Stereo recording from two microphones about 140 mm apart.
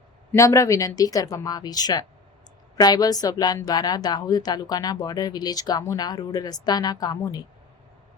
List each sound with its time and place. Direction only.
0.3 s speech: 20° left (ahead or behind)